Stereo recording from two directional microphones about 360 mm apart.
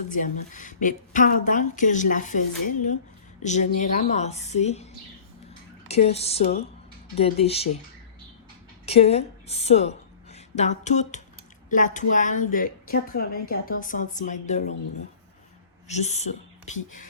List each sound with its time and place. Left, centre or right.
0.1 s a woman's voice: left
5.9 s a sound: centre
8.9 s a woman's voice: centre
15.9 s a woman's voice: centre